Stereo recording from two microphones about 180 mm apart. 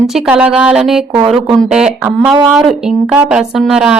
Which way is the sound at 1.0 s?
15° right (ahead or behind).